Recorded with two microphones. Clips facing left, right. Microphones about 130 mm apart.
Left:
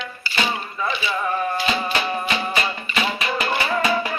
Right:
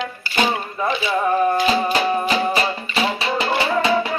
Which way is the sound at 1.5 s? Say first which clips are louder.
Right 5 dB; 40° right (ahead or behind).